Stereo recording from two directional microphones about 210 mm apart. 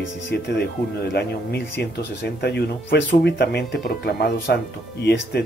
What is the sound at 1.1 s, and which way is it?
Speech, 55° left (ahead or behind).